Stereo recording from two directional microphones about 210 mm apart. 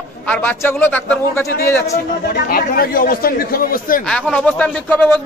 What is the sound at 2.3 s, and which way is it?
A man's voice, 45° left (ahead or behind).